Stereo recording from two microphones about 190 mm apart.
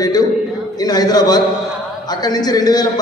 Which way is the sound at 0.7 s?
20° left (ahead or behind).